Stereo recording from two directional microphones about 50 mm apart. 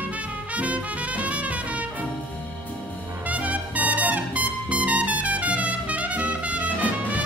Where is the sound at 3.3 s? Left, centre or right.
Right.